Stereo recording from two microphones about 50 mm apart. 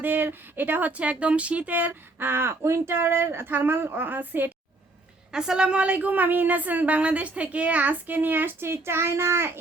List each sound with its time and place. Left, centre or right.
0.0 s speech: right
5.3 s speech: centre; by 9.5 s right